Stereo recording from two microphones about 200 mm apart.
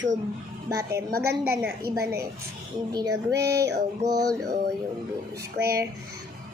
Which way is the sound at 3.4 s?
55° right (ahead or behind).